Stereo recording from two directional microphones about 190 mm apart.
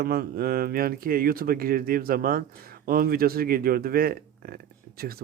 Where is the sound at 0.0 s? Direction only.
55° right (ahead or behind).